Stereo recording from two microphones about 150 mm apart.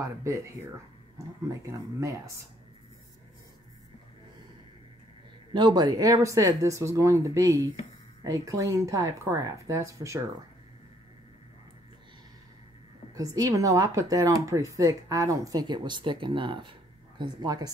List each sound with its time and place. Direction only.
1.1 s speech: 20° right (ahead or behind)
5.5 s speech: 30° right (ahead or behind)
13.1 s speech: 25° right (ahead or behind)